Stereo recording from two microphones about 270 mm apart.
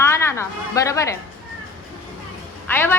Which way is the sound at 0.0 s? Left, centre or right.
Centre.